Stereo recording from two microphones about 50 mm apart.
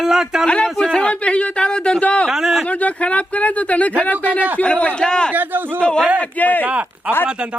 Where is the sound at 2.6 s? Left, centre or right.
Left.